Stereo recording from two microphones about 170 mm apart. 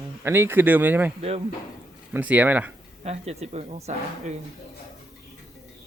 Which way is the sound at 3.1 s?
40° right (ahead or behind).